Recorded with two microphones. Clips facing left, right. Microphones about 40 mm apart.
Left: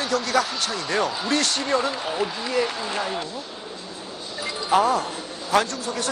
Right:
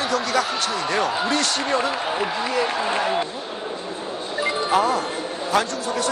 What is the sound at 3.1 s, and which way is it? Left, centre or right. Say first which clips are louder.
Music: right 5 dB; right.